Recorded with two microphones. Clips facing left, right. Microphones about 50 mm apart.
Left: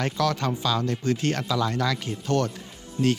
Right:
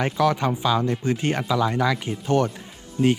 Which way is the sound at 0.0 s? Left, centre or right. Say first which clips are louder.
Right 4 dB; centre.